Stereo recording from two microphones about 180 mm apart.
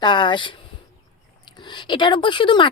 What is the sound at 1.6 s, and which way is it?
Speech, 25° left (ahead or behind).